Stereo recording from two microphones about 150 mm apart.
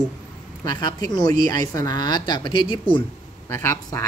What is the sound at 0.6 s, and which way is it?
Speech, 25° left (ahead or behind).